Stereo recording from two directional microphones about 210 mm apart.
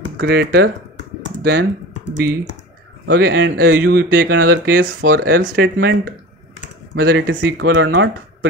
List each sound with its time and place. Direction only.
0.2 s speech: 50° right (ahead or behind)
3.1 s a man's voice: 50° right (ahead or behind)
3.8 s speech: 45° right (ahead or behind)
7.0 s speech: 45° right (ahead or behind)
7.5 s a man's voice: 60° right (ahead or behind)